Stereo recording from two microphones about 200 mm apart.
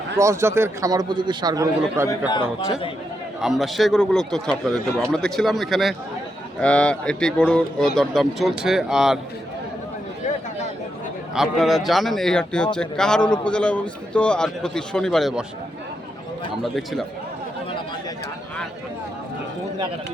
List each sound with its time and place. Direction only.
0.2 s a man's voice: 15° right (ahead or behind)
2.0 s a man's voice: 20° left (ahead or behind)
3.4 s speech: centre (ahead or behind)
11.3 s speech: centre (ahead or behind)
16.7 s speech: centre (ahead or behind)